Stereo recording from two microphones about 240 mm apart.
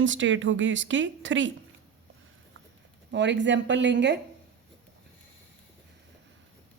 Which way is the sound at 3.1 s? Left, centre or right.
Right.